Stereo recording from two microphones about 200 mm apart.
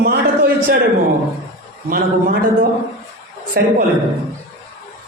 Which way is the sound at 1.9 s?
45° right (ahead or behind).